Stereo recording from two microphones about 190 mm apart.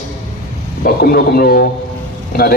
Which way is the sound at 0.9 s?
55° left (ahead or behind).